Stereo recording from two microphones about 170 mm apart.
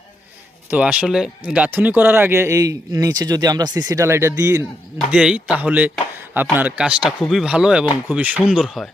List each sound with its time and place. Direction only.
0.7 s a man's voice: 5° right (ahead or behind)
4.9 s a man's voice: 5° right (ahead or behind)